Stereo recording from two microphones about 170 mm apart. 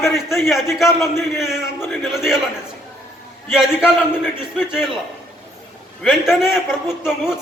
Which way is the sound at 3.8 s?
5° right (ahead or behind).